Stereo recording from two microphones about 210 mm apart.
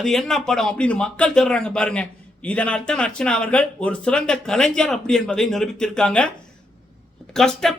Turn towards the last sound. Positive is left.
turn(degrees=0)  # may be behind; listen again after turning